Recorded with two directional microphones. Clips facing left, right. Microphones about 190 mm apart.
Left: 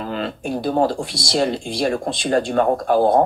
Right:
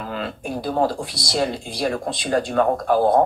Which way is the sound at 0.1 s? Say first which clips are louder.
Left 3 dB; 25° left (ahead or behind).